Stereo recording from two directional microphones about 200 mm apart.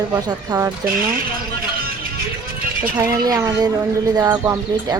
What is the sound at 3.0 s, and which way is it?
Speech, 15° right (ahead or behind).